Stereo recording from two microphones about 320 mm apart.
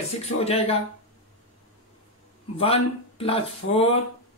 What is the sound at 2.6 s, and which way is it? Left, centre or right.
Speech, centre.